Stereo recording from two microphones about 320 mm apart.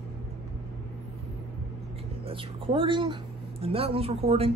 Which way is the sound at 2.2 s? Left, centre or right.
Centre.